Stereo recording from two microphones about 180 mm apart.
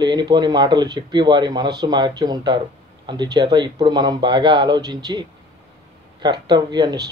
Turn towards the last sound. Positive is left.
turn(degrees=-20)  # may be behind; listen again after turning